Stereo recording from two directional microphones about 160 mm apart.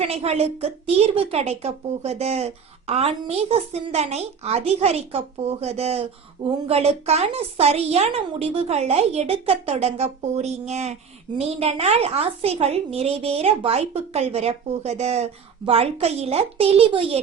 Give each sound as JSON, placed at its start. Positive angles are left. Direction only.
{"t": 0.0, "sound": "a woman's voice", "side_deg": -40}